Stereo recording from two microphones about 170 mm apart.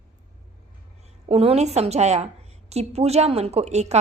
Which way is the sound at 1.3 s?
35° right (ahead or behind).